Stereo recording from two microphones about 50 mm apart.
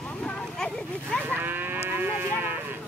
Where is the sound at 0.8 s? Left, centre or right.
Left.